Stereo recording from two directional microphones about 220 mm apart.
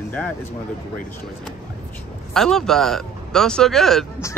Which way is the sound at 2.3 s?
Centre (ahead or behind).